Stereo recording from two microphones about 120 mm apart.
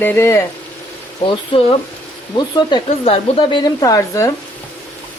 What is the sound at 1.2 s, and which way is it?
Speech, 45° left (ahead or behind).